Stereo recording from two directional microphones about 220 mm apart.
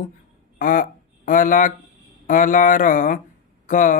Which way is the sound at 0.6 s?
40° left (ahead or behind).